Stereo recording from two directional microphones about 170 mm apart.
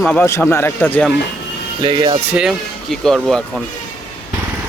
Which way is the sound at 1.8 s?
25° right (ahead or behind).